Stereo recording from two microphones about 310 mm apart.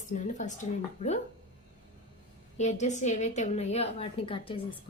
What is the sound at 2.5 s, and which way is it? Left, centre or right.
A woman's voice, left.